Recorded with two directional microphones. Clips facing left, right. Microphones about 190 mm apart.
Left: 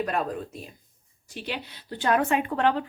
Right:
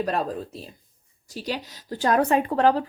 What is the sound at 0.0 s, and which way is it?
Speech, 35° right (ahead or behind).